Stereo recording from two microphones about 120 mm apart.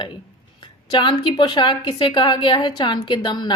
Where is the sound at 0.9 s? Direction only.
40° left (ahead or behind).